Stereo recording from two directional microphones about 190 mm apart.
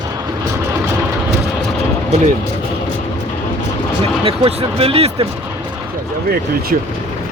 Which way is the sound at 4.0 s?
30° right (ahead or behind).